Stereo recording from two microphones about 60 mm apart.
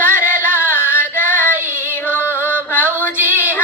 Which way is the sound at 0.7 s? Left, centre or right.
Left.